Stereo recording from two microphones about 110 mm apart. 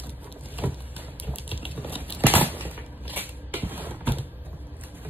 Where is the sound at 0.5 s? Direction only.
15° right (ahead or behind).